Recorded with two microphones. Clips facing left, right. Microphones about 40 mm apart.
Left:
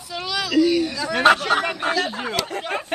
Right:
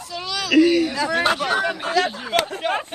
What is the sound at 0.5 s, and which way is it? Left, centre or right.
Speech, right.